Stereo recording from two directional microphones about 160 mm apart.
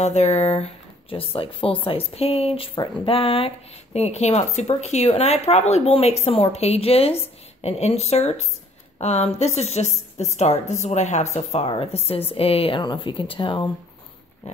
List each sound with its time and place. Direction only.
0.0 s speech: 45° left (ahead or behind)